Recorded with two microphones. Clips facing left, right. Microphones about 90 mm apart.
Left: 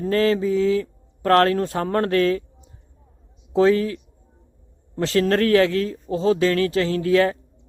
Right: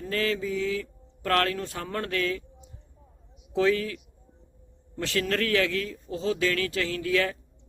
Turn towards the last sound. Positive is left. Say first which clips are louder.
# left 8 dB
turn(degrees=35)  # may be behind; listen again after turning